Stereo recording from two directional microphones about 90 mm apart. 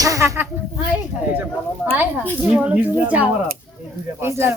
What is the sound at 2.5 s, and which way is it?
Speech, 15° right (ahead or behind).